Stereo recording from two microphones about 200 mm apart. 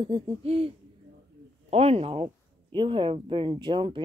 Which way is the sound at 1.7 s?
30° right (ahead or behind).